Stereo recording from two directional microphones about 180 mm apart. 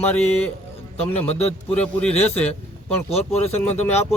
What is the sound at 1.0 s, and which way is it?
Speech, 35° left (ahead or behind).